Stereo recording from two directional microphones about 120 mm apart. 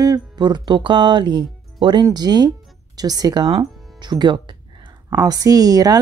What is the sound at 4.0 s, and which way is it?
Music, 40° right (ahead or behind).